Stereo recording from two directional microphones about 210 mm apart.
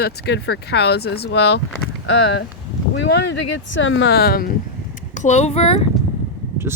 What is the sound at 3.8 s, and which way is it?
Speech, 65° left (ahead or behind).